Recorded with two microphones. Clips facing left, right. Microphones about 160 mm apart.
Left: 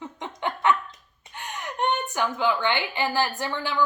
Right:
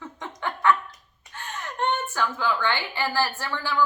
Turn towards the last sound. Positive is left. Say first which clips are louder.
# left 1 dB
turn(degrees=20)  # may be behind; listen again after turning